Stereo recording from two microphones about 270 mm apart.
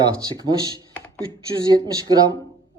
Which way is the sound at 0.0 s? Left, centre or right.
Centre.